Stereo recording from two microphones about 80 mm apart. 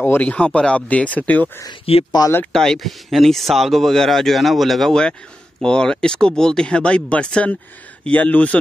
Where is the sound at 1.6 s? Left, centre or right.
Left.